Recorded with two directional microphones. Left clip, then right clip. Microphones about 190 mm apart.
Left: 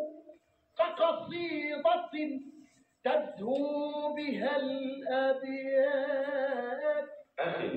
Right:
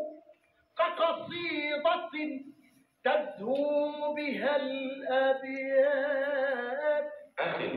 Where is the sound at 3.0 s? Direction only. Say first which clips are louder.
Right 1 dB; 15° left (ahead or behind).